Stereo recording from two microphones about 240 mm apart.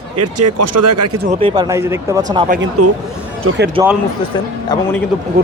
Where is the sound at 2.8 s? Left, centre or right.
Right.